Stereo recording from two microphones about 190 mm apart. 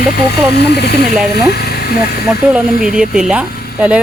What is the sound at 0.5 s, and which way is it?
Speech, 60° left (ahead or behind).